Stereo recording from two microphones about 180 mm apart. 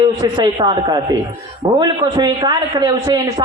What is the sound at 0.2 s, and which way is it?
Speech, 25° right (ahead or behind).